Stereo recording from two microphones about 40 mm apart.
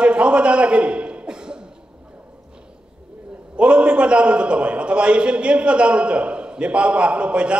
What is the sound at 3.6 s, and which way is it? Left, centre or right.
A man's voice, right.